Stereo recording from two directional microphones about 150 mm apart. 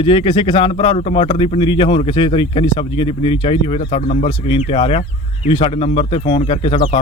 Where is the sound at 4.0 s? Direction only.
50° left (ahead or behind).